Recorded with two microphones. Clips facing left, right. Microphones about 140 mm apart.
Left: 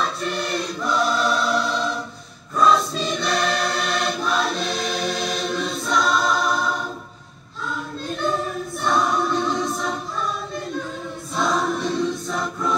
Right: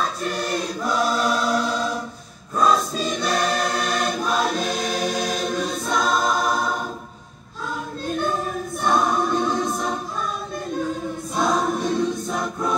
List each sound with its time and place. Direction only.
0.0 s choir: 45° right (ahead or behind)
8.8 s choir: 45° right (ahead or behind)
9.3 s music: 50° right (ahead or behind)
11.3 s choir: 50° right (ahead or behind)